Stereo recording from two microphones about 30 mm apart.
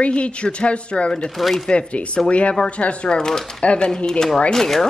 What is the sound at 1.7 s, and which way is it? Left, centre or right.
Speech, left.